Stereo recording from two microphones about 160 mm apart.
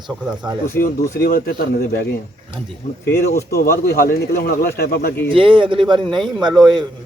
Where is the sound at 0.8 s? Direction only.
70° left (ahead or behind).